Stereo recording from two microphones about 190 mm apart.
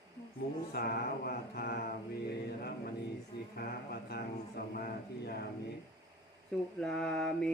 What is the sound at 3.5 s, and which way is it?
Speech, 55° left (ahead or behind).